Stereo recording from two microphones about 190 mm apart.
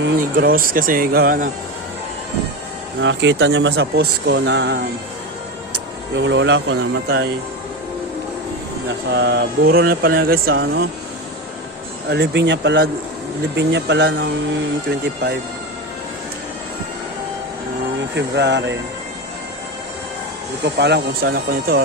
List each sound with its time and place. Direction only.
0.2 s mantra: 50° right (ahead or behind)
3.0 s speech: 75° right (ahead or behind)
6.1 s speech: 70° right (ahead or behind)
9.1 s mantra: 65° right (ahead or behind)
10.5 s speech: 60° right (ahead or behind)
12.0 s speech: 65° right (ahead or behind)
18.1 s speech: 65° right (ahead or behind)
20.7 s speech: 60° right (ahead or behind)